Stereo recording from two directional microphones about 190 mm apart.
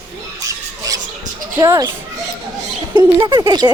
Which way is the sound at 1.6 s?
20° right (ahead or behind).